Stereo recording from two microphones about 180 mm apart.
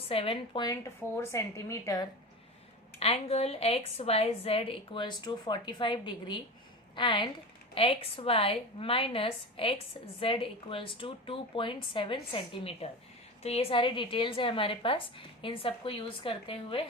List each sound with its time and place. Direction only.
0.1 s speech: 30° left (ahead or behind)
3.0 s a woman's voice: 35° left (ahead or behind)